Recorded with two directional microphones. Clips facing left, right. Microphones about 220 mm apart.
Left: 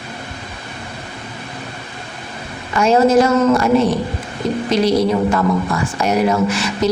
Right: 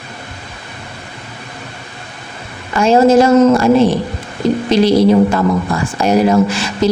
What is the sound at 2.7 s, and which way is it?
Speech, 30° right (ahead or behind).